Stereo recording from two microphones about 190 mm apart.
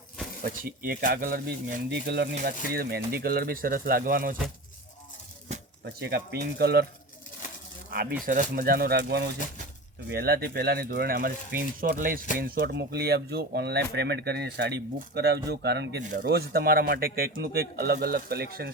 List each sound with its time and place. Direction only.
0.4 s speech: 50° right (ahead or behind)
5.8 s speech: 55° right (ahead or behind)
8.2 s speech: 45° right (ahead or behind)